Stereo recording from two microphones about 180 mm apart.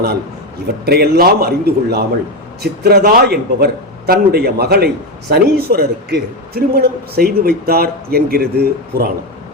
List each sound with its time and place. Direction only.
0.9 s a man's voice: 60° right (ahead or behind)